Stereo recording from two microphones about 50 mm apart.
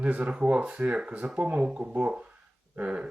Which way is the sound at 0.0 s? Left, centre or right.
Right.